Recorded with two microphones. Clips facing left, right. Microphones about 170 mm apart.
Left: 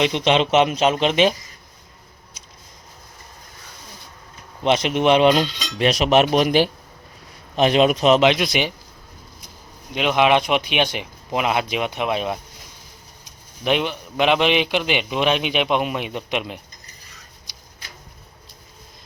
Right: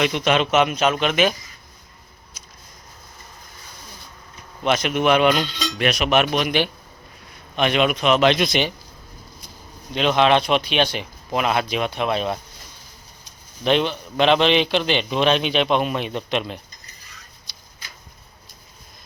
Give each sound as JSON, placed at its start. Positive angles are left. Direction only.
{"t": 0.0, "sound": "a man's voice", "side_deg": 25}
{"t": 4.6, "sound": "cutlery", "side_deg": 30}
{"t": 8.2, "sound": "a man's voice", "side_deg": 10}
{"t": 9.9, "sound": "a man's voice", "side_deg": 10}
{"t": 13.7, "sound": "a man's voice", "side_deg": 10}
{"t": 17.5, "sound": "a sound", "side_deg": 15}